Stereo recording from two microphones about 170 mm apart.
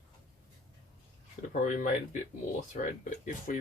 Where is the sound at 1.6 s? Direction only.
50° left (ahead or behind).